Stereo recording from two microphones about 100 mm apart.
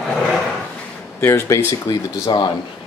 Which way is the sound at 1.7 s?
45° left (ahead or behind).